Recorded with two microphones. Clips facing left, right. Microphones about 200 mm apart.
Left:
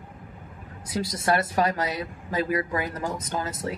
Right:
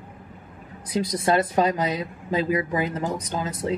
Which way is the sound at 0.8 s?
20° right (ahead or behind).